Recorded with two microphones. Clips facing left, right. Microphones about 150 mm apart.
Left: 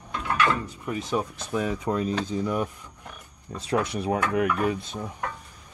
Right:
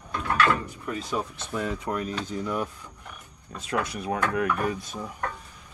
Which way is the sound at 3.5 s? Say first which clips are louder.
Left 3 dB; 30° left (ahead or behind).